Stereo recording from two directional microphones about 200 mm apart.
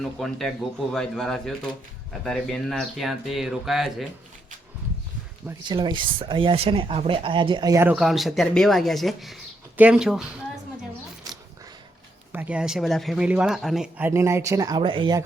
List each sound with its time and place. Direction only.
0.2 s speech: centre (ahead or behind)
5.6 s speech: 20° right (ahead or behind); by 10.2 s centre (ahead or behind)
12.3 s speech: 10° right (ahead or behind); by 15.2 s 25° right (ahead or behind)